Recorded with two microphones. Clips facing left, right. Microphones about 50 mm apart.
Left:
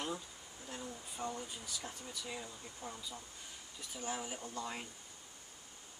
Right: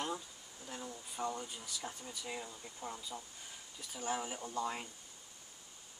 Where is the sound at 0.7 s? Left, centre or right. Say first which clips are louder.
Even; centre.